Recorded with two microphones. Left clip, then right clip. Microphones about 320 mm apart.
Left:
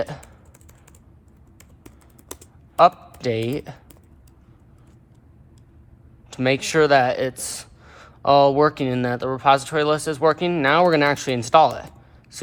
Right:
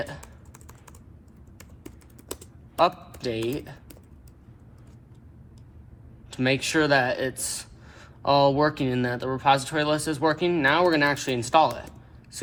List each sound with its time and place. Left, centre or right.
2.7 s a man's voice: left
6.3 s speech: left